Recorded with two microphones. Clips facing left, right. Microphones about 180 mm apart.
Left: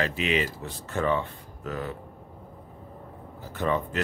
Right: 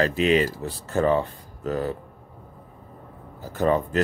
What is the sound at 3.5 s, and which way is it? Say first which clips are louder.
Speech: right 6 dB; 40° right (ahead or behind).